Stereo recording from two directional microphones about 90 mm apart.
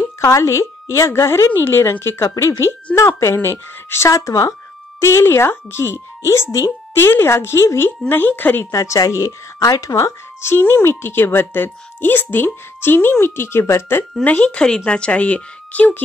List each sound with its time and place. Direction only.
0.2 s a woman's voice: 35° left (ahead or behind)
8.7 s speech: 35° left (ahead or behind)
14.2 s speech: 15° left (ahead or behind)